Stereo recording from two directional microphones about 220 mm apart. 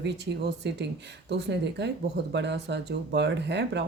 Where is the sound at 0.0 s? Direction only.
50° right (ahead or behind).